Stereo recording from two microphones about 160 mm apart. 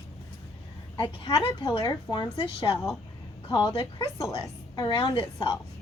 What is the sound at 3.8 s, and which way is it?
A woman's voice, 20° left (ahead or behind).